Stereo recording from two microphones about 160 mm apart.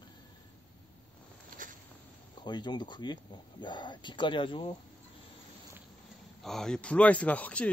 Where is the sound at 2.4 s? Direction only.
30° left (ahead or behind).